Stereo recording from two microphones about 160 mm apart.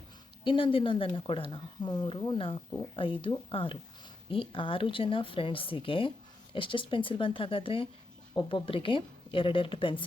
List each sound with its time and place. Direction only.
0.4 s speech: 35° left (ahead or behind)